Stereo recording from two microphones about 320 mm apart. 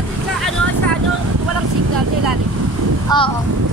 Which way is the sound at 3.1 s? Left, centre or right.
Centre.